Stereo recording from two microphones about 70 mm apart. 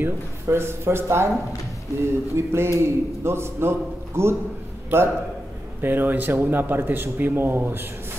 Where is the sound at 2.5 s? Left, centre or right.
Right.